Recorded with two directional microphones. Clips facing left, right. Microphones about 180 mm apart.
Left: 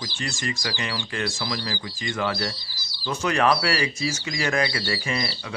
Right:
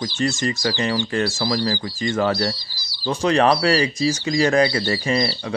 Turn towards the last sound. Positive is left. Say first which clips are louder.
# right 7 dB
turn(degrees=-35)  # may be behind; listen again after turning